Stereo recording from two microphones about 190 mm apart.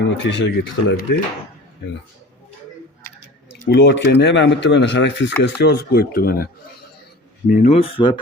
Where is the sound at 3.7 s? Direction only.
65° left (ahead or behind).